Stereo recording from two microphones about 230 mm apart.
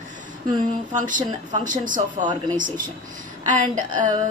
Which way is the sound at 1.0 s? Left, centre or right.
Right.